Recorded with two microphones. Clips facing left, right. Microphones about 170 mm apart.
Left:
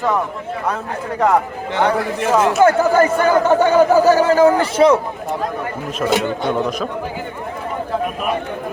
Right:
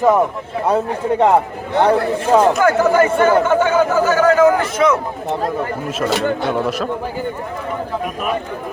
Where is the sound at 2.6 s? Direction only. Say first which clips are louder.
Left 1 dB; 35° left (ahead or behind).